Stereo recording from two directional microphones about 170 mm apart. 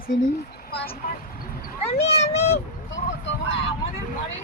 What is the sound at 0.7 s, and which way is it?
Vehicle, 70° left (ahead or behind).